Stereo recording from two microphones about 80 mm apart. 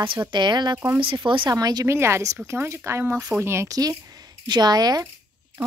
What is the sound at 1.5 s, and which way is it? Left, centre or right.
Speech, right.